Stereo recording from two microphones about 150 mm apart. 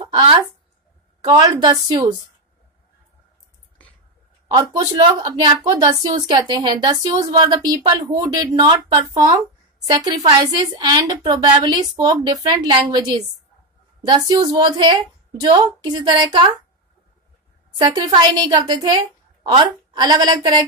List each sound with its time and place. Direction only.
0.0 s speech: 30° right (ahead or behind)
4.5 s speech: 30° right (ahead or behind)
17.7 s speech: 25° right (ahead or behind)